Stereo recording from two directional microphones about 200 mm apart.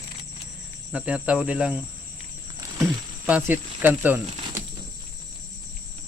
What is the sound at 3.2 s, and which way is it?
Speech, 10° right (ahead or behind).